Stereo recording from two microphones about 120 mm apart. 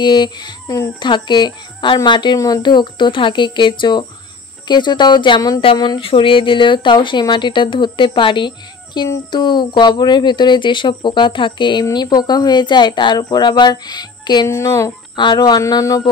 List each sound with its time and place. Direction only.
0.0 s speech: 40° left (ahead or behind)
14.5 s speech: 25° left (ahead or behind)
15.1 s speech: 40° left (ahead or behind)